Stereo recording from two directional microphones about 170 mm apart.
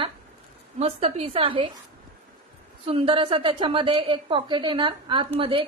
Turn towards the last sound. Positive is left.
turn(degrees=-30)  # may be behind; listen again after turning